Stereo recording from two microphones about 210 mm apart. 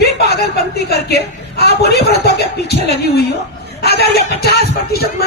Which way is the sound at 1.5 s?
50° left (ahead or behind).